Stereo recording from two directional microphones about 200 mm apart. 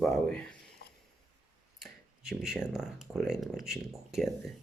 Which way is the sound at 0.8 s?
50° left (ahead or behind).